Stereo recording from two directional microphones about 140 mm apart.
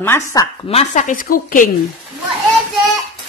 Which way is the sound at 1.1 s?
75° left (ahead or behind).